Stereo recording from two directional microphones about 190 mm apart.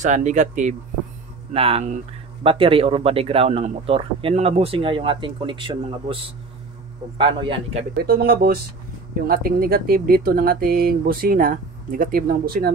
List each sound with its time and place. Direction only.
0.0 s speech: 40° right (ahead or behind)
8.0 s speech: 50° right (ahead or behind)